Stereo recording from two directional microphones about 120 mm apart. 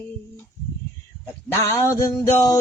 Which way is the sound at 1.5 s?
20° left (ahead or behind).